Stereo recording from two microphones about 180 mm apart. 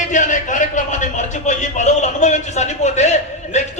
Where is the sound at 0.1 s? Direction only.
45° left (ahead or behind).